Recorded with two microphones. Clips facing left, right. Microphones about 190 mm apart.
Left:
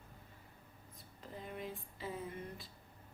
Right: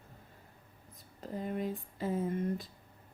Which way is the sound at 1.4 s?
45° right (ahead or behind).